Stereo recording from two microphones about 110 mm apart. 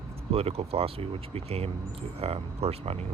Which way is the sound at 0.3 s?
65° right (ahead or behind).